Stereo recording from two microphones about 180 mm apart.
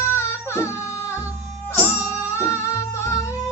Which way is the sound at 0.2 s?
15° left (ahead or behind).